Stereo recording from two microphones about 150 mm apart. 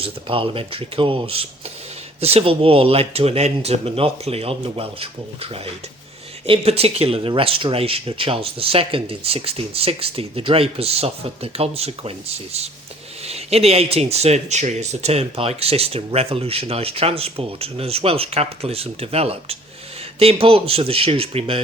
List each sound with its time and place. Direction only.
0.0 s speech: 35° right (ahead or behind)
13.2 s speech: 45° right (ahead or behind)